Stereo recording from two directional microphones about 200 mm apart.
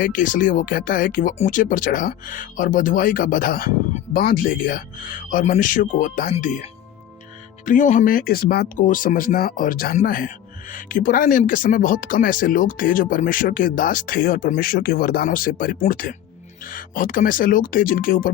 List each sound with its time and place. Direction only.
0.0 s speech: 40° left (ahead or behind)
7.6 s speech: 40° left (ahead or behind)